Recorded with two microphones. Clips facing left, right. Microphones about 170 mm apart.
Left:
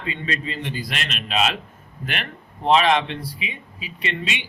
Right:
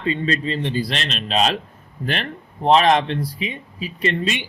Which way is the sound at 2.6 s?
40° right (ahead or behind).